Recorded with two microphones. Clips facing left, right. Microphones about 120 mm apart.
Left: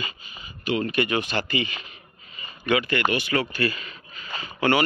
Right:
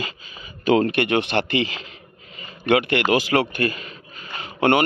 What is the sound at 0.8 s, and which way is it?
Speech, 70° right (ahead or behind).